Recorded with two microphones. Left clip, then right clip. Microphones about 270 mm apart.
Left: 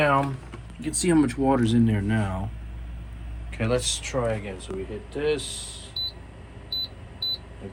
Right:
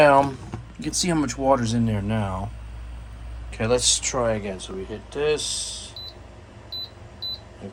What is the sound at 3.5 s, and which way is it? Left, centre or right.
Speech, centre.